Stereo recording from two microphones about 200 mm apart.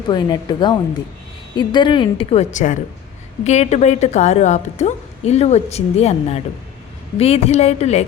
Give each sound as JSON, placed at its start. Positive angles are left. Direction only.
{"t": 0.1, "sound": "a woman's voice", "side_deg": 20}